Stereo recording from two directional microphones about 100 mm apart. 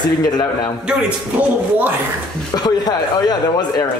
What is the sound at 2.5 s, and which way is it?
Speech, 40° left (ahead or behind).